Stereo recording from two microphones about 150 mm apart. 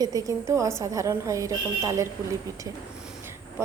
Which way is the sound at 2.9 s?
5° right (ahead or behind).